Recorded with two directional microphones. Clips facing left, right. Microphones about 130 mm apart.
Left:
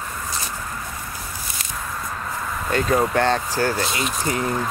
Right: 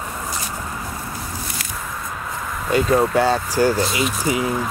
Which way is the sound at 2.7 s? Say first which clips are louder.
Right 3 dB; 5° right (ahead or behind).